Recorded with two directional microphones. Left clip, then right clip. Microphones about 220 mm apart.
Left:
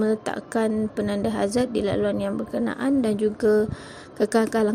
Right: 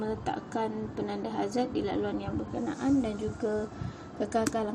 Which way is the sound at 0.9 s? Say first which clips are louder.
Left 8 dB; 65° left (ahead or behind).